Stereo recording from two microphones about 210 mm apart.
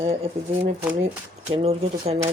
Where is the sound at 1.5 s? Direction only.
30° right (ahead or behind).